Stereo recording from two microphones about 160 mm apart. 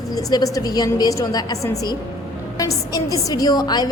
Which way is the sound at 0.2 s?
20° left (ahead or behind).